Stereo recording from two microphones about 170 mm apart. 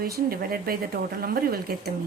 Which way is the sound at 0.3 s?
60° right (ahead or behind).